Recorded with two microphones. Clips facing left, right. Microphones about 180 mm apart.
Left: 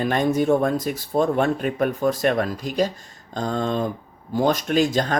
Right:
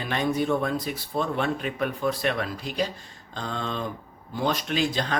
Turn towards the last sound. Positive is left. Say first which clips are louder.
# left 6 dB
turn(degrees=45)  # may be behind; listen again after turning